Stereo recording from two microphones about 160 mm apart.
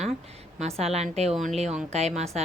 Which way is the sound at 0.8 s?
40° right (ahead or behind).